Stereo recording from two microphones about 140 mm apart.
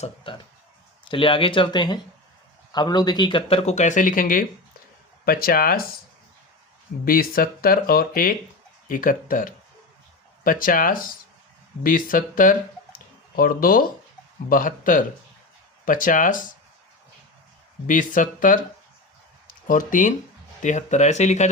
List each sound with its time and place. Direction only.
0.3 s speech: 35° left (ahead or behind); by 4.4 s 75° left (ahead or behind)
5.2 s speech: 90° left
7.0 s speech: 90° left
8.9 s speech: 80° left
10.4 s speech: 90° left
14.5 s speech: 75° left (ahead or behind)
17.8 s speech: 70° left (ahead or behind)